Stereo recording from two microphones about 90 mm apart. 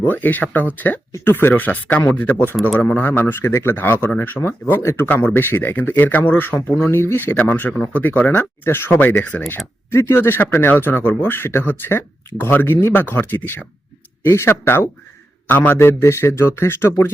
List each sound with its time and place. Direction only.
0.0 s speech: 20° left (ahead or behind)
9.9 s speech: 30° left (ahead or behind)